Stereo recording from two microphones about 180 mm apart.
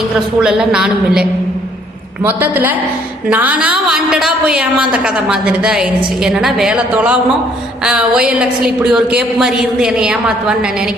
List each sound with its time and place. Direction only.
0.4 s a woman's voice: 5° right (ahead or behind)